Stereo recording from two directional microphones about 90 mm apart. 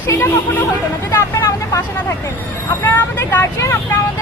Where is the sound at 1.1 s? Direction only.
35° left (ahead or behind).